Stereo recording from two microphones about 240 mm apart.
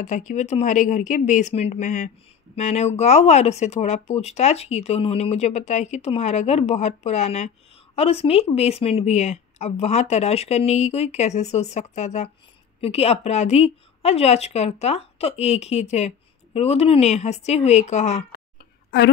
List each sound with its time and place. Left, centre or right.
0.0 s speech: left